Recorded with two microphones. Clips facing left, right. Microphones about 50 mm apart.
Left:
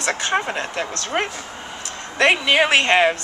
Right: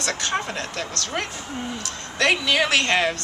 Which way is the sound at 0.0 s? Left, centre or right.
Left.